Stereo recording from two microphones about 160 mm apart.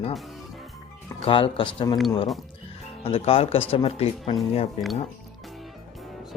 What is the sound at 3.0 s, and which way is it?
Speech, 35° left (ahead or behind).